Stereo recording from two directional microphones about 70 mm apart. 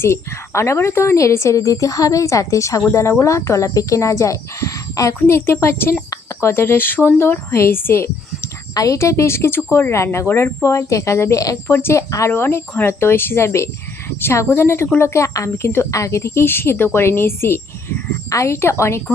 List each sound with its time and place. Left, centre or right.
0.0 s a woman's voice: left
5.2 s a woman's voice: left
8.7 s a woman's voice: left
10.2 s a woman's voice: left
10.6 s a woman's voice: left
11.7 s a woman's voice: left
18.3 s a woman's voice: left